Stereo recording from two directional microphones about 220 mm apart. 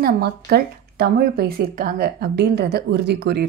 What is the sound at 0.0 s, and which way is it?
A woman's voice, 45° right (ahead or behind).